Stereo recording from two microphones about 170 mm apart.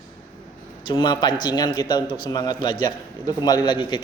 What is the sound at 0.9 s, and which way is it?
A man's voice, 25° left (ahead or behind).